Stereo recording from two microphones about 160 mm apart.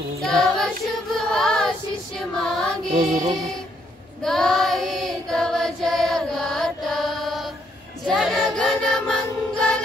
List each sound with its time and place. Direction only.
0.2 s music: centre (ahead or behind)
2.9 s music: 50° right (ahead or behind)
4.2 s child singing: 5° left (ahead or behind)
8.1 s choir: centre (ahead or behind)